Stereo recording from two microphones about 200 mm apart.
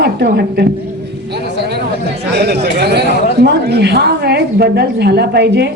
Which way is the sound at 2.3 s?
55° right (ahead or behind).